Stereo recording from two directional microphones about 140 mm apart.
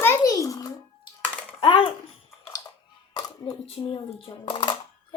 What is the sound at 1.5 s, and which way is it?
Speech, 40° left (ahead or behind).